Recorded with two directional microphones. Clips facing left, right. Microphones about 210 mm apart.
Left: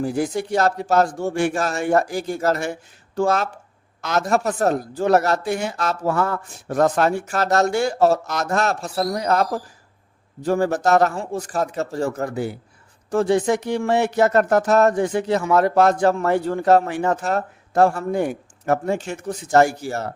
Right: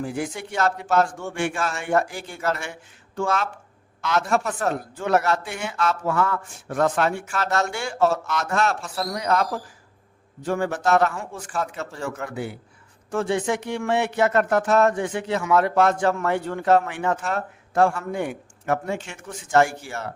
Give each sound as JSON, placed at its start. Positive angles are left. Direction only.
{"t": 0.0, "sound": "speech", "side_deg": 40}